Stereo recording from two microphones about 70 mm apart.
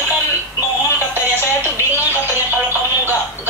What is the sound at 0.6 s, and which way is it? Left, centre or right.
Synthetic singing, left.